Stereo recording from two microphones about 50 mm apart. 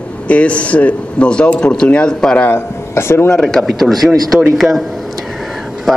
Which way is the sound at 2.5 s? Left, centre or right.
Left.